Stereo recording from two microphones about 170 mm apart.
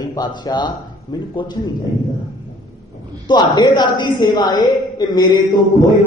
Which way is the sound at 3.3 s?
25° left (ahead or behind).